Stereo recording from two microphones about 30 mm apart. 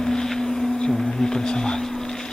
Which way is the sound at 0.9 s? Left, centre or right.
Centre.